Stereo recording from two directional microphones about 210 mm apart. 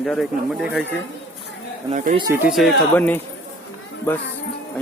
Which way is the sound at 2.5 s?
Centre (ahead or behind).